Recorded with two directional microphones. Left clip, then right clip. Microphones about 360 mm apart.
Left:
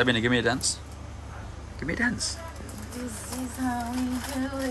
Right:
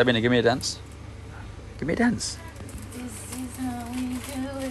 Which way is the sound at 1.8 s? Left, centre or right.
Centre.